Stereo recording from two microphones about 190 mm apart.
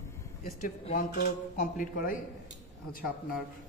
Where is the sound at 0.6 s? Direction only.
45° left (ahead or behind).